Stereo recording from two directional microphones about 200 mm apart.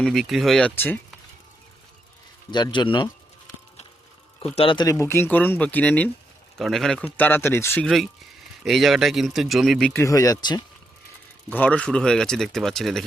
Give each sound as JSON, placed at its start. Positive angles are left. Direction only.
{"t": 0.0, "sound": "speech", "side_deg": 0}
{"t": 2.5, "sound": "speech", "side_deg": 20}
{"t": 4.4, "sound": "speech", "side_deg": 30}
{"t": 11.4, "sound": "speech", "side_deg": 10}